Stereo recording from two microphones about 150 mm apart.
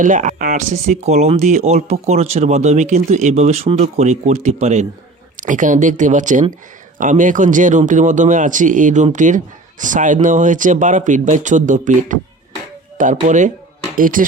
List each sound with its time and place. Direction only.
0.0 s speech: 60° right (ahead or behind)